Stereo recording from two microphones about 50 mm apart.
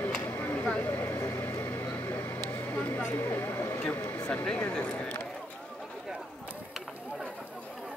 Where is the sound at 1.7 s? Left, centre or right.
Left.